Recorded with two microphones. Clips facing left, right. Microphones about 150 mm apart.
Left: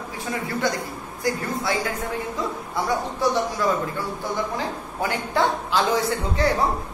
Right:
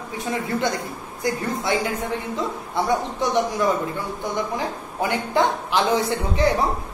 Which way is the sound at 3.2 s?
20° right (ahead or behind).